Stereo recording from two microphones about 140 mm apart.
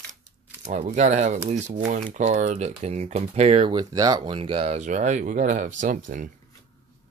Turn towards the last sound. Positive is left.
turn(degrees=-65)  # may be behind; listen again after turning